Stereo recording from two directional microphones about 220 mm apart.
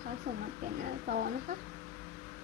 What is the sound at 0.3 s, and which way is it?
Speech, 45° right (ahead or behind).